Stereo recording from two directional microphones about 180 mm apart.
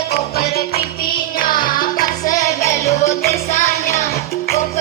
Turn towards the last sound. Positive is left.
turn(degrees=15)  # may be behind; listen again after turning